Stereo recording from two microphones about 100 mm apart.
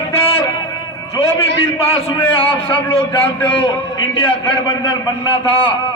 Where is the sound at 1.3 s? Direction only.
70° left (ahead or behind); by 5.3 s 45° left (ahead or behind).